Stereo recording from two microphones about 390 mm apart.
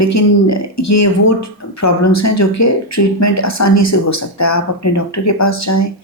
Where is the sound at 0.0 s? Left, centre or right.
Left.